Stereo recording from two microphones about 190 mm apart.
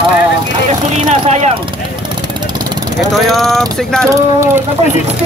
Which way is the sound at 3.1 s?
Centre (ahead or behind).